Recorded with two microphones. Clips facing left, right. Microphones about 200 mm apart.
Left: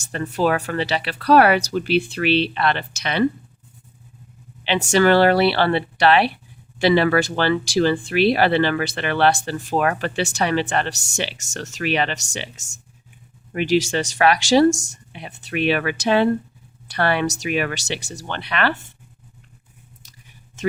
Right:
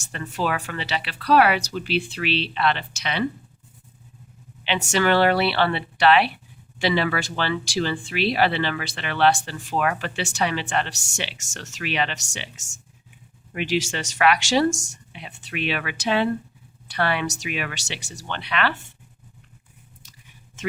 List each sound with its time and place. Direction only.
0.1 s speech: 45° left (ahead or behind)
4.6 s speech: 35° left (ahead or behind)